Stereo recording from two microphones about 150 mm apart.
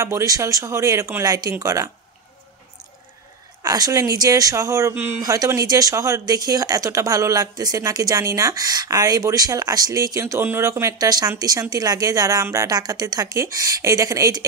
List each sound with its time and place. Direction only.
0.0 s speech: 20° right (ahead or behind)
3.6 s speech: 25° right (ahead or behind)